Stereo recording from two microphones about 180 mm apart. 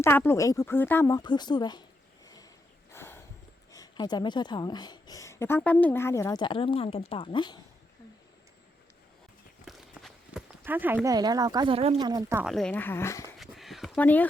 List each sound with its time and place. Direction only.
0.0 s a woman's voice: 15° left (ahead or behind)
2.9 s a sound: 15° left (ahead or behind)
3.7 s speech: 20° left (ahead or behind)
9.6 s run: centre (ahead or behind)
10.6 s speech: 10° right (ahead or behind); by 11.9 s 30° right (ahead or behind)
11.9 s speech: 20° right (ahead or behind)
12.4 s speech: centre (ahead or behind)
13.4 s a sound: centre (ahead or behind)